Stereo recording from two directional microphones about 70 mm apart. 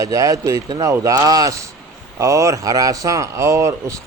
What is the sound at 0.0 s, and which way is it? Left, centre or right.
Speech, right.